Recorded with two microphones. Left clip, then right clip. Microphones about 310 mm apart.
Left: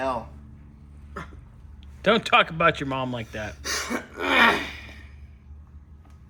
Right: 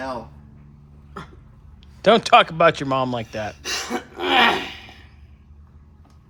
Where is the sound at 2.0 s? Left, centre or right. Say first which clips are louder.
Right 6 dB; centre.